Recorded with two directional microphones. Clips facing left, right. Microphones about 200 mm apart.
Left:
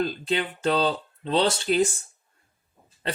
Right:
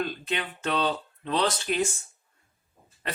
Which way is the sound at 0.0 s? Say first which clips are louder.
Left 5 dB; 35° left (ahead or behind).